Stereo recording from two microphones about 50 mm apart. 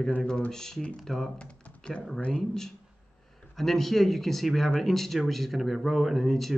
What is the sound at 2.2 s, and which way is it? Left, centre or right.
Speech, left.